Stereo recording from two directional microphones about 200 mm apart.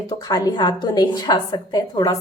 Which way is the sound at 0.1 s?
20° left (ahead or behind).